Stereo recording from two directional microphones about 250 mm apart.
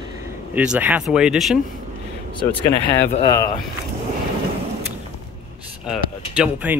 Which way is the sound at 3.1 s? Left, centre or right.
Centre.